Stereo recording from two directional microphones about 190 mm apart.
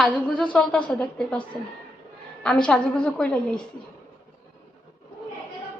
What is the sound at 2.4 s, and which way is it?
A woman's voice, 5° left (ahead or behind).